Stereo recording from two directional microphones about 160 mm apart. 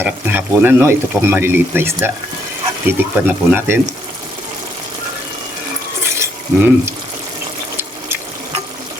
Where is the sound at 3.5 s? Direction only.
15° right (ahead or behind).